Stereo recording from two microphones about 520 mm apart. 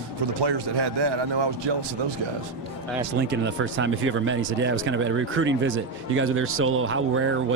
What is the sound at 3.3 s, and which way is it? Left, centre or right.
Speech, right.